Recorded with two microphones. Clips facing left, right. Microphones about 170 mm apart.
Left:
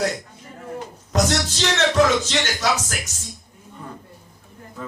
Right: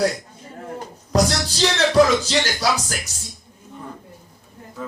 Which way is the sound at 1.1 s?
35° right (ahead or behind).